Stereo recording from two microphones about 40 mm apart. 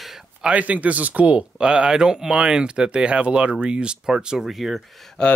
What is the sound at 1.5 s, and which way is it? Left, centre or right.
Speech, right.